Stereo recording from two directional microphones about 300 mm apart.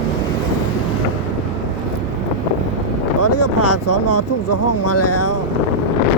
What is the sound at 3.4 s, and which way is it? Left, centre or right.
Speech, left.